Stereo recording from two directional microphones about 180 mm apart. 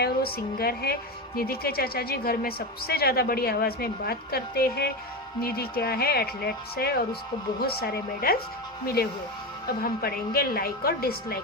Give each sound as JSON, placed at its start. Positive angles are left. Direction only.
{"t": 0.0, "sound": "a woman's voice", "side_deg": 60}
{"t": 9.8, "sound": "a woman's voice", "side_deg": 60}